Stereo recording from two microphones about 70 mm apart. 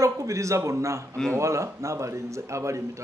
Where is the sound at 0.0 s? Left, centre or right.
Right.